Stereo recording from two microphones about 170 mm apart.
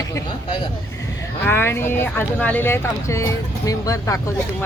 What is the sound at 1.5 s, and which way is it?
Speech, 15° left (ahead or behind).